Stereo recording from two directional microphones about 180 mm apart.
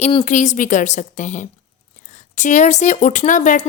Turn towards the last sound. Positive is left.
turn(degrees=45)  # may be behind; listen again after turning